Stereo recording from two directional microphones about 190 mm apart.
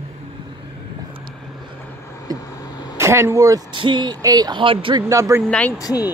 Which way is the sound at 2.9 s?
15° right (ahead or behind).